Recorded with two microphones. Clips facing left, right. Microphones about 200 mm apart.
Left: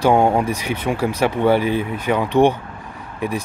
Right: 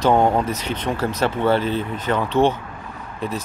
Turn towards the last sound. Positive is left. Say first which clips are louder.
# left 3 dB
turn(degrees=10)  # may be behind; listen again after turning